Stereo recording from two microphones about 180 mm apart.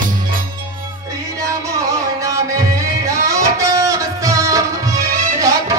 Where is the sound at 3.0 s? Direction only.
15° right (ahead or behind).